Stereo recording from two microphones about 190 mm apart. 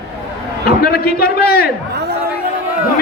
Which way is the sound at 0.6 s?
55° left (ahead or behind).